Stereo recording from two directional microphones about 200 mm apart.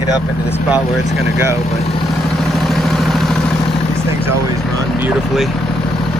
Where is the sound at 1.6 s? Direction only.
30° left (ahead or behind).